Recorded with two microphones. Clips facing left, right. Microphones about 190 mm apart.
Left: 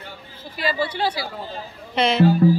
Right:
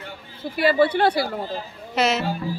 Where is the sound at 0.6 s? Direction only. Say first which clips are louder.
Right 6 dB; 60° right (ahead or behind).